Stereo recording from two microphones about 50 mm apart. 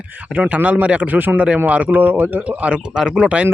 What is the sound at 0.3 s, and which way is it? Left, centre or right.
Speech, right.